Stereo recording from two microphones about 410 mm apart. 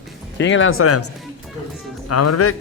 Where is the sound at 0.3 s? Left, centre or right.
Left.